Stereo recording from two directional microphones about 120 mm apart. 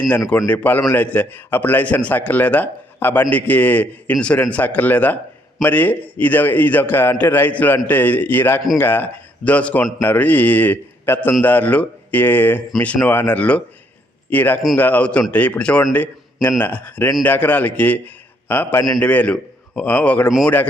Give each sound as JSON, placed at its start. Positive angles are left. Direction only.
{"t": 0.4, "sound": "a man's voice", "side_deg": 15}